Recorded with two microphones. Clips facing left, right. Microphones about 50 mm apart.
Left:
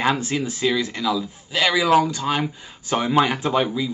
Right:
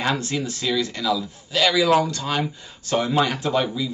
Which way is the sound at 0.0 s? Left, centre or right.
Centre.